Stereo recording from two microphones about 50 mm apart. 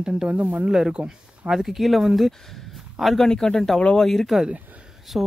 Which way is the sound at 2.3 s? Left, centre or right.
Centre.